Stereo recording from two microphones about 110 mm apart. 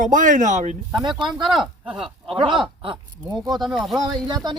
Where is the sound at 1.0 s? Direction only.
45° right (ahead or behind).